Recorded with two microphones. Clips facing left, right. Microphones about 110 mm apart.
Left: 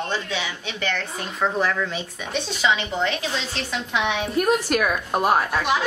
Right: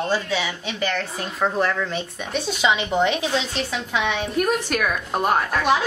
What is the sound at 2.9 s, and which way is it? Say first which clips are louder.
Speech: right 4 dB; 20° right (ahead or behind).